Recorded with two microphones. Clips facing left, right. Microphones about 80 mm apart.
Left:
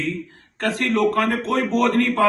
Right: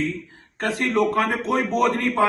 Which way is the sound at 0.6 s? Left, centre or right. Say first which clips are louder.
Left 1 dB; centre.